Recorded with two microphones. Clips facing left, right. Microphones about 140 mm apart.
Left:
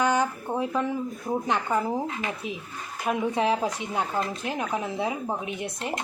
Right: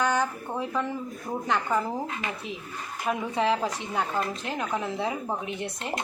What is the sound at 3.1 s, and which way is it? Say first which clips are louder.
A woman's voice: left 1 dB; 15° left (ahead or behind).